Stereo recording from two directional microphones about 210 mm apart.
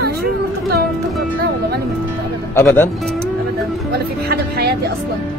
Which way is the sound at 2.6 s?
10° left (ahead or behind).